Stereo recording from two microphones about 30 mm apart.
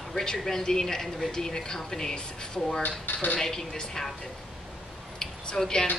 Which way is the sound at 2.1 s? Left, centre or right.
Left.